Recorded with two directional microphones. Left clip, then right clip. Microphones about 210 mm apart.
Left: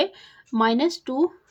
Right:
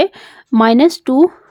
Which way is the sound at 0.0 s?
45° right (ahead or behind).